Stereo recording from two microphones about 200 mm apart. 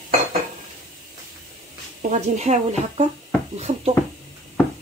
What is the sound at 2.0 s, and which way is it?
Speech, 35° right (ahead or behind).